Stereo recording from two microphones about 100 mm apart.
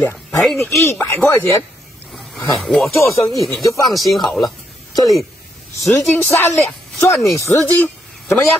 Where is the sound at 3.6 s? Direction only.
35° left (ahead or behind).